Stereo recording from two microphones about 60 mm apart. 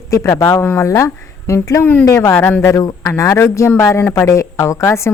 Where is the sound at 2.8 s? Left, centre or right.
Left.